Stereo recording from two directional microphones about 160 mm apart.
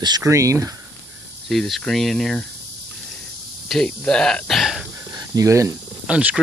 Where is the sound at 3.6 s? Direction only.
5° left (ahead or behind).